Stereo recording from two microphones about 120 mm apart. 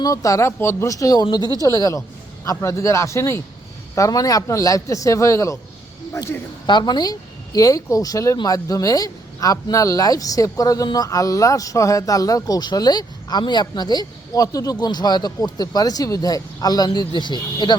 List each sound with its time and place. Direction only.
0.0 s a man's voice: 30° left (ahead or behind)
1.4 s speech: 35° right (ahead or behind)
1.6 s a man's voice: 30° left (ahead or behind)
6.7 s a man's voice: 40° left (ahead or behind)